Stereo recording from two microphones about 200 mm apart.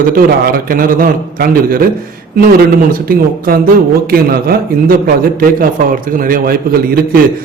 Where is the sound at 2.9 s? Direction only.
45° right (ahead or behind).